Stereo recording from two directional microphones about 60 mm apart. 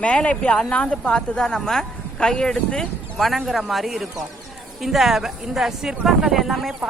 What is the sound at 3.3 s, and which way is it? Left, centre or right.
Speech, centre.